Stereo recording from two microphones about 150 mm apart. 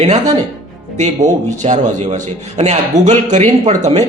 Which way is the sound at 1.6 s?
55° right (ahead or behind).